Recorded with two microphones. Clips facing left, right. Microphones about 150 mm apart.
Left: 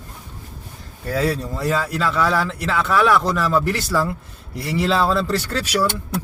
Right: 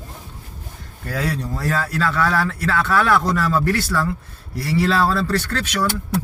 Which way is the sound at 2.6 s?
10° left (ahead or behind).